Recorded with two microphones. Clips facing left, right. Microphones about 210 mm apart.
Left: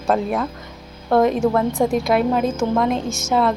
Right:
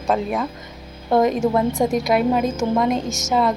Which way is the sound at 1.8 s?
Centre (ahead or behind).